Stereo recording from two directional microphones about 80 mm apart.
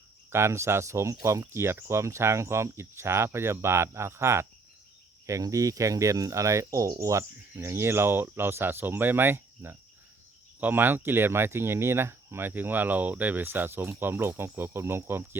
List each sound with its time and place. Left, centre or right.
0.3 s cricket: right
10.6 s speech: right